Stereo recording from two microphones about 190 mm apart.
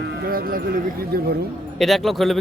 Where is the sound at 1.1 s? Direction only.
55° right (ahead or behind).